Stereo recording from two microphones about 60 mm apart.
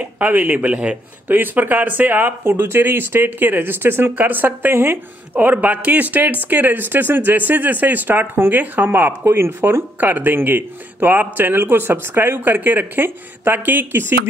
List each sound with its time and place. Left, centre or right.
0.0 s speech: right
1.3 s speech: right